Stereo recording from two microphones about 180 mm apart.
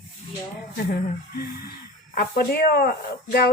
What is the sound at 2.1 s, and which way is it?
Speech, 60° left (ahead or behind).